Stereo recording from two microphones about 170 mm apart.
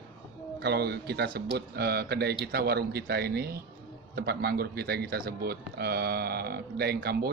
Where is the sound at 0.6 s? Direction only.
70° right (ahead or behind).